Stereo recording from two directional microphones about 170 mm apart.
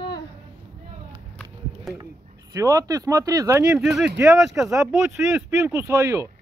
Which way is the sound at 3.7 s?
5° right (ahead or behind).